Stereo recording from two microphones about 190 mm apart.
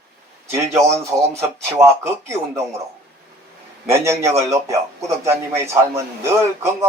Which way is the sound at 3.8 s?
15° right (ahead or behind).